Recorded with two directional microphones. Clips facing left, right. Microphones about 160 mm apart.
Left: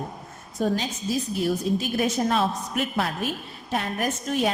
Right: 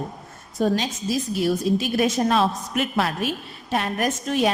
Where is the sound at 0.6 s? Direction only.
90° right.